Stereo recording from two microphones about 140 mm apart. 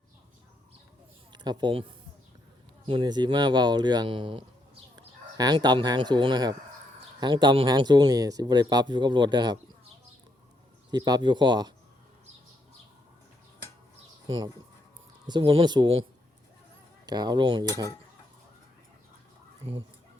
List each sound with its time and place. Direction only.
1.3 s speech: 35° right (ahead or behind)
10.9 s speech: 30° right (ahead or behind)
15.3 s speech: 35° right (ahead or behind)
17.1 s speech: 30° right (ahead or behind)
19.6 s speech: 45° right (ahead or behind)